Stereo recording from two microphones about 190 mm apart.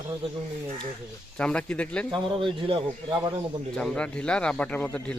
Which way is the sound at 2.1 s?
25° right (ahead or behind).